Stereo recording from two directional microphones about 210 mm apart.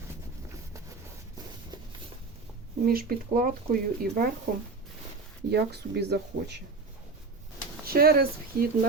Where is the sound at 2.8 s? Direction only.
45° right (ahead or behind).